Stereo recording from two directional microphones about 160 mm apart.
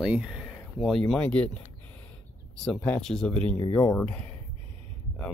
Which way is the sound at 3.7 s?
20° left (ahead or behind).